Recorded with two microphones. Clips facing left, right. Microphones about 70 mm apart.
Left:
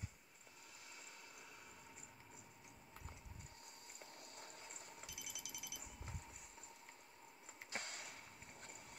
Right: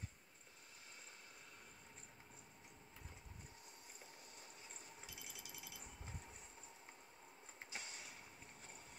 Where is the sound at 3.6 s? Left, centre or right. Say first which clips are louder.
Left 1 dB; left.